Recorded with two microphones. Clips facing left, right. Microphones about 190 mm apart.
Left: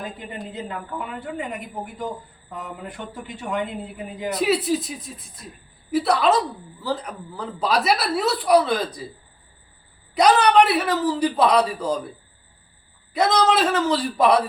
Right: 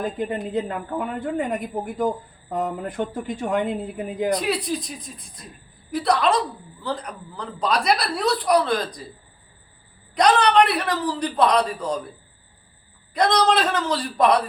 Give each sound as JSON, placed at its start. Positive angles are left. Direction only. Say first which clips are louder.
{"t": 0.0, "sound": "a woman's voice", "louder": "right 7 dB", "side_deg": -50}
{"t": 4.4, "sound": "a woman's voice", "louder": "left 4 dB", "side_deg": 5}
{"t": 10.2, "sound": "a man's voice", "louder": "left 1 dB", "side_deg": 10}
{"t": 13.1, "sound": "a woman's voice", "louder": "even", "side_deg": 5}